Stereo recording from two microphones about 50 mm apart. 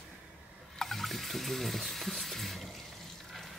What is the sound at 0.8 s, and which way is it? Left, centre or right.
Water, centre.